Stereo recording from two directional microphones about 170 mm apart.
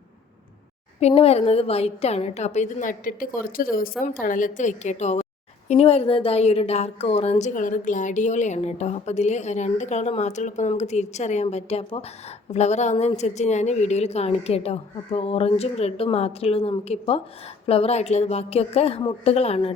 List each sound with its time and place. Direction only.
0.9 s a woman's voice: 40° left (ahead or behind)